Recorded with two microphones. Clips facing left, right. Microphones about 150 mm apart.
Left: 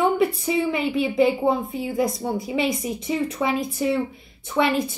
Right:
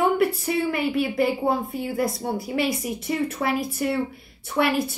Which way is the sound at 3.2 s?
5° right (ahead or behind).